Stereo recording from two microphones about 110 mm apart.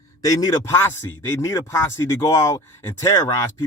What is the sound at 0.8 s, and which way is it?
Speech, 25° left (ahead or behind).